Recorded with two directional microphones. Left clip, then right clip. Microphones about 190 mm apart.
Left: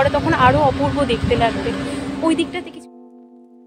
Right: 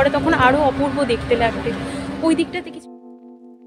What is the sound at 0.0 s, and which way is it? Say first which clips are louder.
A woman's voice: even; 10° right (ahead or behind).